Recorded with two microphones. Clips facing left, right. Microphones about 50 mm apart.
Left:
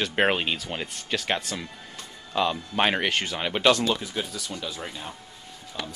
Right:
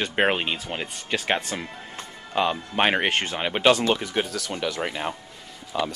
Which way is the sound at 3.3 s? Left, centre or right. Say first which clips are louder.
Right 2 dB; right.